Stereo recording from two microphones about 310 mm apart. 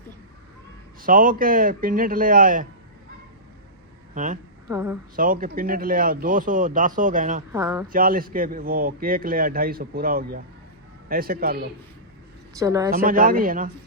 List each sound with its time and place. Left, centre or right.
1.0 s speech: right
4.1 s speech: right
4.7 s a woman's voice: centre
5.1 s speech: right
7.5 s a woman's voice: centre
7.9 s speech: right
12.5 s a woman's voice: centre
12.9 s speech: right